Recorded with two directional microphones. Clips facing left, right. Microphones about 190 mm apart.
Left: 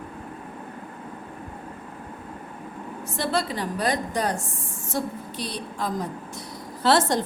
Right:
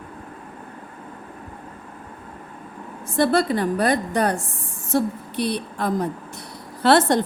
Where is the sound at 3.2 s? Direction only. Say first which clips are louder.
Right 8 dB; 55° right (ahead or behind).